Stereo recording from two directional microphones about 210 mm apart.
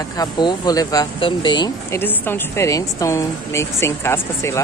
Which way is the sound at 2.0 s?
10° left (ahead or behind).